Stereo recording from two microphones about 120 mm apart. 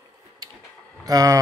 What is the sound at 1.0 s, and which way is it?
Speech, 30° right (ahead or behind).